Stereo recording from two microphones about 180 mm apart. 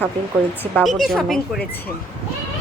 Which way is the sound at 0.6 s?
5° left (ahead or behind).